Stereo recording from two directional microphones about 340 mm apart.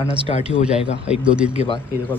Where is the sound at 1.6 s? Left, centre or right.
Centre.